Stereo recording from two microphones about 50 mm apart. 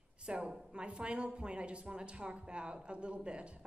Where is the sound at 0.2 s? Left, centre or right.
Centre.